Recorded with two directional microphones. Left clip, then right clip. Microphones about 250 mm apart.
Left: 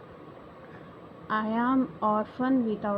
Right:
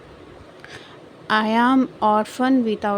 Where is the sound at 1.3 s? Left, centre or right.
Right.